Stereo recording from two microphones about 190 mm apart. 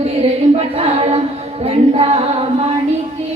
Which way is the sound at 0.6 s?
30° right (ahead or behind).